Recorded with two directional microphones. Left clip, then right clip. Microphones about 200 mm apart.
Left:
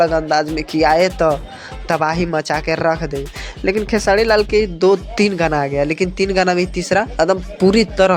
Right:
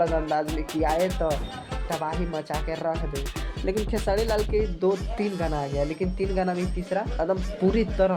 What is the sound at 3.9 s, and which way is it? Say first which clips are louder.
Speech: left 13 dB; 30° left (ahead or behind).